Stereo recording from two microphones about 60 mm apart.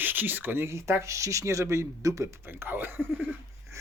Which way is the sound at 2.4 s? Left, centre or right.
Right.